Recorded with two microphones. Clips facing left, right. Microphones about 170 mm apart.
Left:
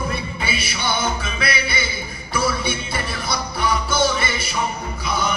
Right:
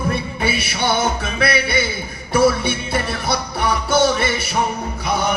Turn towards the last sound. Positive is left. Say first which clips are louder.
# right 3 dB
turn(degrees=-65)  # may be behind; listen again after turning